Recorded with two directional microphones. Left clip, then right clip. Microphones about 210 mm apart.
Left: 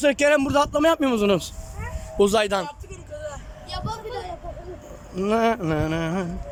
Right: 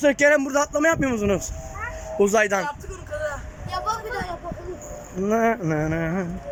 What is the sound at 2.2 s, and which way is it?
Speech, 15° left (ahead or behind).